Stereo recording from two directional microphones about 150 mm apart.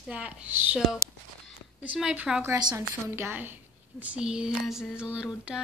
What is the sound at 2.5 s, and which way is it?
Speech, 25° right (ahead or behind).